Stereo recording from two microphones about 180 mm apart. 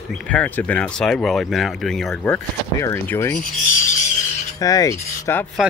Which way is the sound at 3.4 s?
45° left (ahead or behind).